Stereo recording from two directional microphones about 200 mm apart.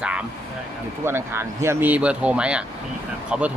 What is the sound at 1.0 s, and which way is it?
Speech, 10° right (ahead or behind).